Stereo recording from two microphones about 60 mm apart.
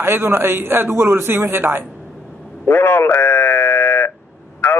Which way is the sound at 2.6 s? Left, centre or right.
Left.